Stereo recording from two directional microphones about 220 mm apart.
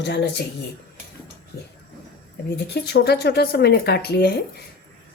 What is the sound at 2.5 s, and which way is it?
A woman's voice, 50° left (ahead or behind).